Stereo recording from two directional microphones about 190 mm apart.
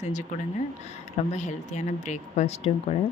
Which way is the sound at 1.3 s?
40° left (ahead or behind).